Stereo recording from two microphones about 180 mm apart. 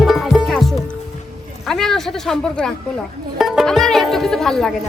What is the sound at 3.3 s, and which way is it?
Speech, centre (ahead or behind).